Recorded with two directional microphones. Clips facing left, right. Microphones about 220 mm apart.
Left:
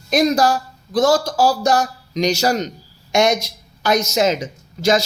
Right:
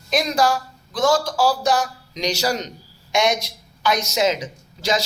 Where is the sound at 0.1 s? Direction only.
45° left (ahead or behind).